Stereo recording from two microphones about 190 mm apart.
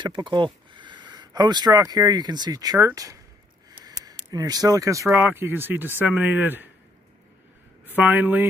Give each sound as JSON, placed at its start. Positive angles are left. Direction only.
{"t": 0.0, "sound": "speech", "side_deg": -25}
{"t": 3.8, "sound": "a sound", "side_deg": -20}
{"t": 5.1, "sound": "speech", "side_deg": -10}
{"t": 8.0, "sound": "speech", "side_deg": -10}